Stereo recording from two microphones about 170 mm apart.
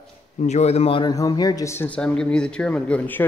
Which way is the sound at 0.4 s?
40° left (ahead or behind).